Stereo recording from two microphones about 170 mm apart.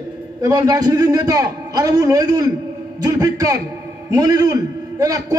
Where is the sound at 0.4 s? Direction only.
25° right (ahead or behind).